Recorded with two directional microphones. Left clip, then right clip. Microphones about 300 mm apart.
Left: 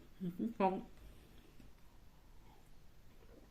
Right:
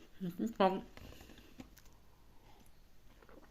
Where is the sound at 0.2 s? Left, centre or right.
Centre.